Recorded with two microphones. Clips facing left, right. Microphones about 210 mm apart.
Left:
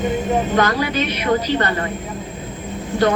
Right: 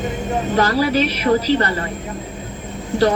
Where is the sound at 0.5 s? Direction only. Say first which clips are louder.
Right 2 dB; 30° right (ahead or behind).